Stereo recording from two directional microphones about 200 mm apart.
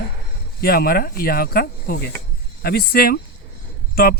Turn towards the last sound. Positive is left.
turn(degrees=50)  # may be behind; listen again after turning